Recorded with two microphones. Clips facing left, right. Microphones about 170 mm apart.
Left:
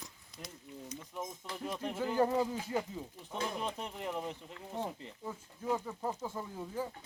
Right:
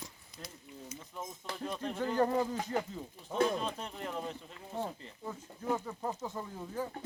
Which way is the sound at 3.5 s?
15° left (ahead or behind).